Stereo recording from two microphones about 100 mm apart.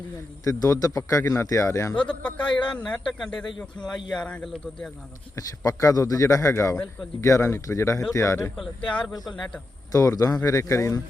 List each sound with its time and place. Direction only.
0.4 s a man's voice: 35° left (ahead or behind)
2.0 s a man's voice: 10° left (ahead or behind)
2.4 s a man's voice: 50° left (ahead or behind)
2.8 s a man's voice: 5° left (ahead or behind)
5.4 s a man's voice: 35° left (ahead or behind)
9.2 s a man's voice: 5° left (ahead or behind)
9.9 s a man's voice: 35° left (ahead or behind)